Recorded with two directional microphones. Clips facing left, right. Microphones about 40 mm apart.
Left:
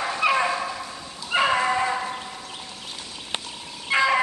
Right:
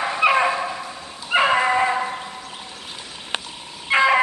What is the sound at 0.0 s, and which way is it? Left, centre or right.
Dog, centre.